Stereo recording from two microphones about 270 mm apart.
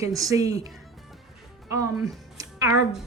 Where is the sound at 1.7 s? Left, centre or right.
Centre.